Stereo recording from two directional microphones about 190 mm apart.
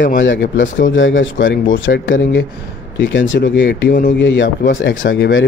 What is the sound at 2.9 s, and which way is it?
Speech, 75° left (ahead or behind).